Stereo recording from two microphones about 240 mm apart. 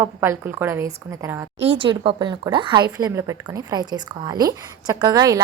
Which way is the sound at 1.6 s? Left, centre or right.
Right.